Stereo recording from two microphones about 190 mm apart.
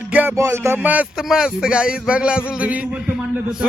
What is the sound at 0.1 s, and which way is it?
Music, 10° right (ahead or behind).